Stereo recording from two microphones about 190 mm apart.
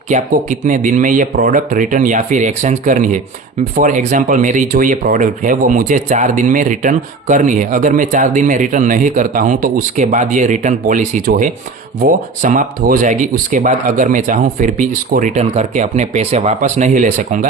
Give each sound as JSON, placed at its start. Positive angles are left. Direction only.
{"t": 0.1, "sound": "speech", "side_deg": -40}